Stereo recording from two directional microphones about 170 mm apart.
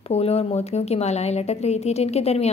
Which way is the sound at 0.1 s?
35° left (ahead or behind).